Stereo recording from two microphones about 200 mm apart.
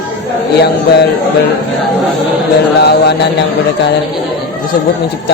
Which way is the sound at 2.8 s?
55° left (ahead or behind).